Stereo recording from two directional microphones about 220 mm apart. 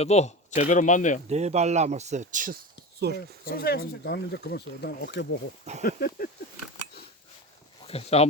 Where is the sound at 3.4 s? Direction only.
45° left (ahead or behind).